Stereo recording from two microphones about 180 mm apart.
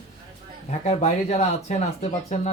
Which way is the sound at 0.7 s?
40° left (ahead or behind).